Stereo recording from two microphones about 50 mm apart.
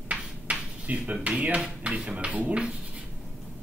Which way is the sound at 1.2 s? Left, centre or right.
Right.